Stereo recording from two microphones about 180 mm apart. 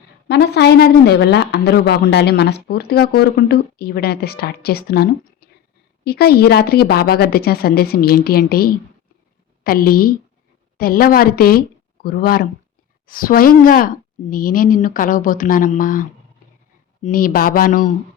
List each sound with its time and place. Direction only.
0.3 s speech: 65° left (ahead or behind); by 17.9 s 45° left (ahead or behind)